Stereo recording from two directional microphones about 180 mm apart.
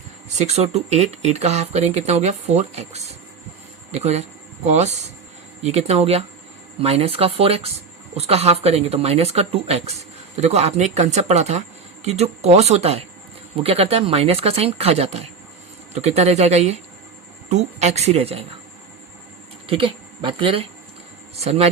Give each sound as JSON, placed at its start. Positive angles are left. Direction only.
{"t": 0.3, "sound": "speech", "side_deg": -35}
{"t": 19.6, "sound": "speech", "side_deg": -30}